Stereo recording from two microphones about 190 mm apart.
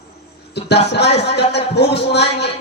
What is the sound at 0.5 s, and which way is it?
A man's voice, 60° left (ahead or behind).